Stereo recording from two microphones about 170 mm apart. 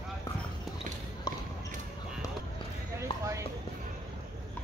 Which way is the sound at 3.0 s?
20° right (ahead or behind).